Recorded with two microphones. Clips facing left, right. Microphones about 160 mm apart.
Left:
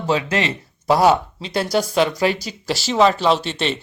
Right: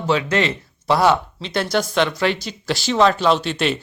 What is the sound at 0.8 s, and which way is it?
Speech, 15° left (ahead or behind).